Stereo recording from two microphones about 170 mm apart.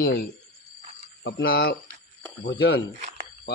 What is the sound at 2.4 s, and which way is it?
Speech, 90° left.